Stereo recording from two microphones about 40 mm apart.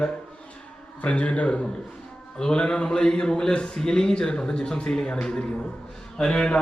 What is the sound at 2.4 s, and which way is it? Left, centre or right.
A man's voice, centre.